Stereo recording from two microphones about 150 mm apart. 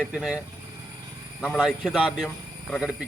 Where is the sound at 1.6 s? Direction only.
Centre (ahead or behind).